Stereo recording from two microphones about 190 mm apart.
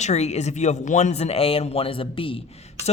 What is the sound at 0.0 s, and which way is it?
Speech, 35° left (ahead or behind).